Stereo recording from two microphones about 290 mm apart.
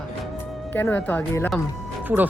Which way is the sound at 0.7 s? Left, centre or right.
Centre.